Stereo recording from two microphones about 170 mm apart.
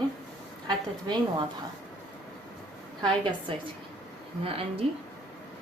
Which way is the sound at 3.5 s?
30° right (ahead or behind).